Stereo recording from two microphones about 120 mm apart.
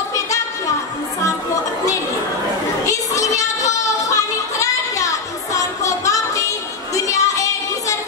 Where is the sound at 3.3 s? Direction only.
25° left (ahead or behind).